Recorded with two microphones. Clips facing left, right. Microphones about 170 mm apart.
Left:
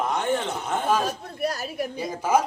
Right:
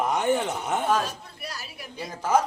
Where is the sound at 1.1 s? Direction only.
45° left (ahead or behind).